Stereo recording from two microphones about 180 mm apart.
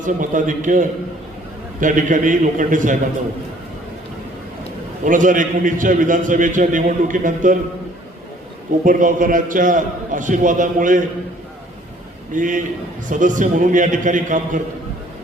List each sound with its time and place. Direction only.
0.0 s a man's voice: 45° right (ahead or behind)
5.0 s a man's voice: 45° right (ahead or behind)
8.8 s a man's voice: 50° right (ahead or behind)
12.3 s a man's voice: 45° right (ahead or behind)